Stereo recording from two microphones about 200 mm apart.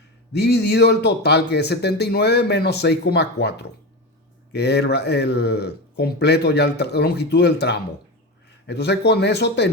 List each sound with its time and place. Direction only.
0.3 s speech: 55° left (ahead or behind)